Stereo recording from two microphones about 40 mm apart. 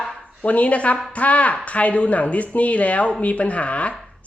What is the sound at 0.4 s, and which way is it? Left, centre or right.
Speech, left.